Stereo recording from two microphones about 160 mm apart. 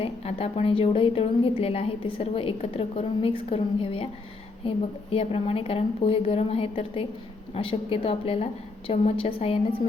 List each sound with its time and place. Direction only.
0.0 s a woman's voice: 40° left (ahead or behind)
5.1 s a woman's voice: 35° left (ahead or behind)